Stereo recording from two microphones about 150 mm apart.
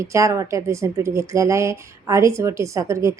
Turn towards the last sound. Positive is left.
turn(degrees=-20)  # may be behind; listen again after turning